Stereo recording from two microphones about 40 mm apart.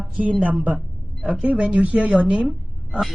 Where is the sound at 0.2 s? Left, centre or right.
Right.